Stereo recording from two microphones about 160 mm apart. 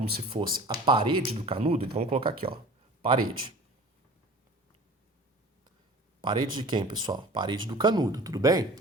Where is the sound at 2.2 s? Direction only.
70° right (ahead or behind).